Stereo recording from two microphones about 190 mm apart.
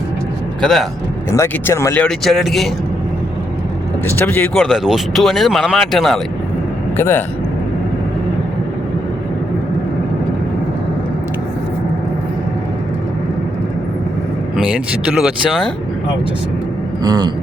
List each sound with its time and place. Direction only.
0.6 s speech: centre (ahead or behind)
1.3 s speech: 15° left (ahead or behind)
4.0 s speech: 10° left (ahead or behind)
14.5 s speech: 5° right (ahead or behind)
17.0 s speech: 20° right (ahead or behind)